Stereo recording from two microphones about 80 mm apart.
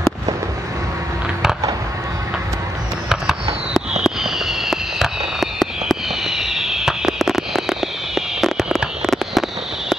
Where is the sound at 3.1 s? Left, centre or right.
Centre.